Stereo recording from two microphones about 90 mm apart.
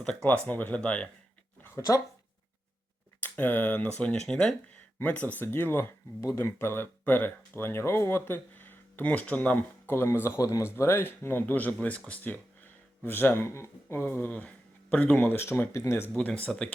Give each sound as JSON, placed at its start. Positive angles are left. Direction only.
{"t": 0.0, "sound": "speech", "side_deg": 10}
{"t": 1.6, "sound": "a sound", "side_deg": 30}
{"t": 3.2, "sound": "speech", "side_deg": 20}
{"t": 9.9, "sound": "speech", "side_deg": 25}
{"t": 16.1, "sound": "speech", "side_deg": 15}